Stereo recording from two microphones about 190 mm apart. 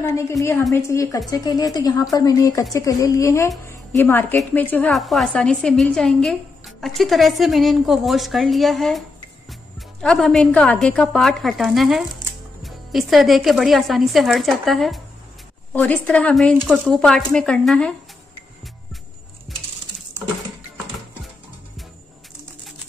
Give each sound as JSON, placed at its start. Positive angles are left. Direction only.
{"t": 0.1, "sound": "a woman's voice", "side_deg": 15}
{"t": 16.5, "sound": "speech", "side_deg": -10}
{"t": 16.8, "sound": "a woman's voice", "side_deg": 0}